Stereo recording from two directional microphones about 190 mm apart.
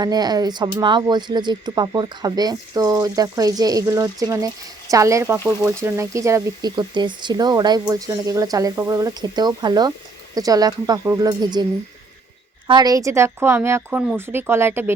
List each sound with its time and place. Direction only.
0.0 s speech: 20° right (ahead or behind)
12.6 s a woman's voice: 20° right (ahead or behind)